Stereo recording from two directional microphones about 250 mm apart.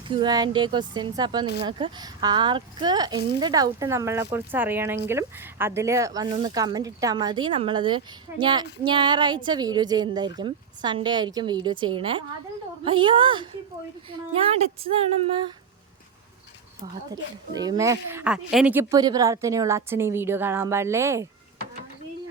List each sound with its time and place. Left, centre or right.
0.1 s a woman's voice: centre
17.5 s speech: centre